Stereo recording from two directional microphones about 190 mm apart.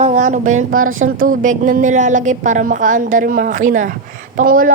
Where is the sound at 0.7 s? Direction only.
90° right.